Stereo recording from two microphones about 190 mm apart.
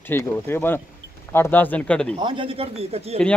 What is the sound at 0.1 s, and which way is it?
Speech, 10° left (ahead or behind).